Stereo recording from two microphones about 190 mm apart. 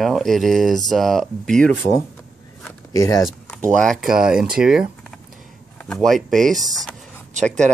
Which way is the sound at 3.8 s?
Centre (ahead or behind).